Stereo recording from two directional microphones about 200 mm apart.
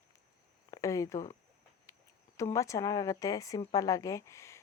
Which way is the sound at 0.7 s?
15° left (ahead or behind).